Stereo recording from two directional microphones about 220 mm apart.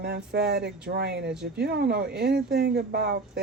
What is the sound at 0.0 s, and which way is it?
Speech, 45° right (ahead or behind).